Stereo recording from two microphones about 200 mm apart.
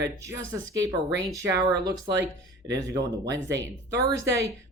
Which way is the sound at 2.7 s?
15° right (ahead or behind).